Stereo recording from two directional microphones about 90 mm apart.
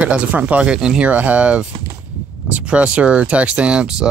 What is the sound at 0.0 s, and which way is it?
Speech, 15° right (ahead or behind).